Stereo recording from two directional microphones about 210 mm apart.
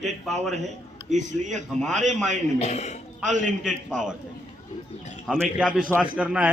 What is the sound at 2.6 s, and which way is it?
Speech, 30° left (ahead or behind).